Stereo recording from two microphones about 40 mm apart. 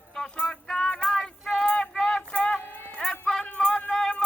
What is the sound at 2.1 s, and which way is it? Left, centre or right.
Music, left.